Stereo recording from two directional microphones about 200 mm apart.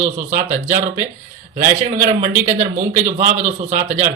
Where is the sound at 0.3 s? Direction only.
40° right (ahead or behind).